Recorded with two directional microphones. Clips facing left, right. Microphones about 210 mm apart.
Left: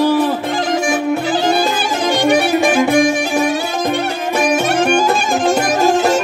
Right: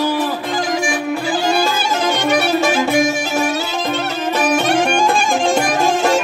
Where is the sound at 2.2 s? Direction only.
15° left (ahead or behind).